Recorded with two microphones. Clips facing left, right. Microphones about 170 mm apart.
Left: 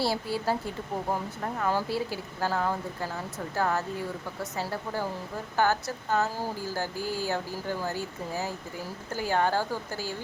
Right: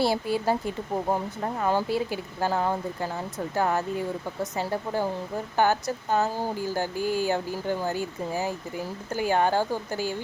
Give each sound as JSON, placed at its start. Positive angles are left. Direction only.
{"t": 0.0, "sound": "speech", "side_deg": -20}
{"t": 1.5, "sound": "speech", "side_deg": -20}